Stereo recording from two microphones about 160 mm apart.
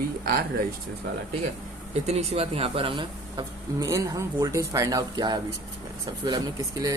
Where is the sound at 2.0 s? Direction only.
40° right (ahead or behind).